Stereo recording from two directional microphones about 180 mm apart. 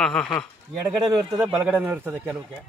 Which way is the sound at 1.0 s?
20° right (ahead or behind).